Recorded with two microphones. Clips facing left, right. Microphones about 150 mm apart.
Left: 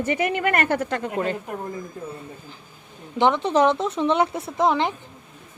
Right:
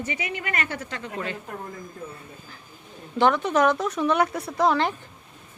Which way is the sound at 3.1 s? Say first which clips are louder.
Left 2 dB; 20° left (ahead or behind).